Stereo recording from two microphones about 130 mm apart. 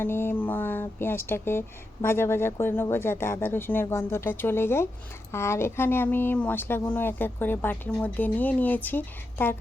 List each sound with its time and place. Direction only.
0.0 s speech: 15° left (ahead or behind)